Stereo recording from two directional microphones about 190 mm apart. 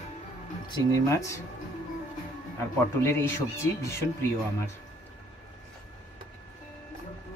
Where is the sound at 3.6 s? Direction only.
15° left (ahead or behind).